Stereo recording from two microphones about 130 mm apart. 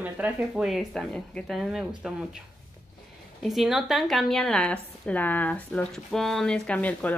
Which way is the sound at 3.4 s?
Centre (ahead or behind).